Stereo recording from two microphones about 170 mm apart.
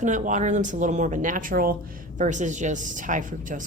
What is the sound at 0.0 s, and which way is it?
A woman's voice, 45° right (ahead or behind).